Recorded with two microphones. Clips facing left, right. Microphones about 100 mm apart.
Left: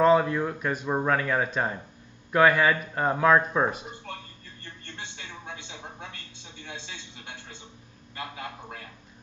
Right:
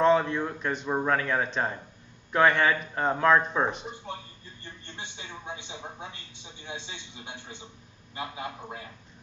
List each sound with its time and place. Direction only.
0.0 s a man's voice: 5° left (ahead or behind)
4.8 s a man's voice: 20° right (ahead or behind)